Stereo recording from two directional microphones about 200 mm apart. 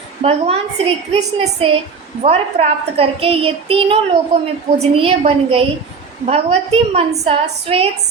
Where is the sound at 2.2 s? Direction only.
30° right (ahead or behind).